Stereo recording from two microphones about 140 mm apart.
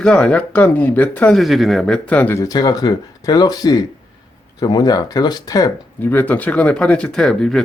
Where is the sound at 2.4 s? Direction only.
25° left (ahead or behind).